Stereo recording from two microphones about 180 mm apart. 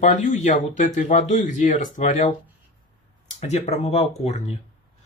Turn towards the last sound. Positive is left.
turn(degrees=35)  # may be behind; listen again after turning